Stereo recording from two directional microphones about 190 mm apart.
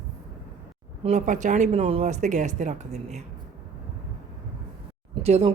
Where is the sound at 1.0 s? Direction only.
40° right (ahead or behind).